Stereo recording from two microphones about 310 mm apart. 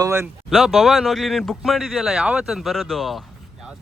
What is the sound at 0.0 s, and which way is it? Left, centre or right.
Speech, centre.